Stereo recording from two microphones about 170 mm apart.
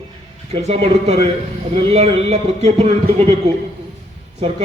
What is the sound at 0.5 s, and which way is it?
A man's voice, 35° right (ahead or behind).